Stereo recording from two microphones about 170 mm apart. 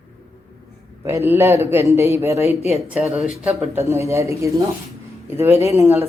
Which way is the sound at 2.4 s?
40° left (ahead or behind).